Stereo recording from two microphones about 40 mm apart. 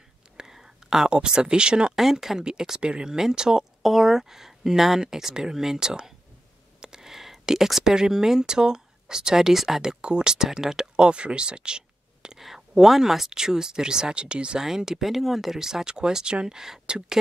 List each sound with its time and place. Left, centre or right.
0.4 s speech: centre
2.0 s speech: centre
10.0 s speech: right
10.3 s speech: centre
11.1 s speech: right
12.4 s speech: centre; by 14.6 s right
14.6 s speech: centre